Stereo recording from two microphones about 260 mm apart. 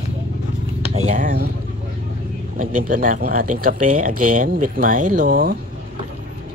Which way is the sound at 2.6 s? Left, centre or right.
Right.